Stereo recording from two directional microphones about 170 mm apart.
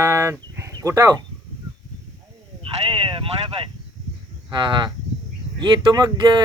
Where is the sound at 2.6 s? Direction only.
30° right (ahead or behind).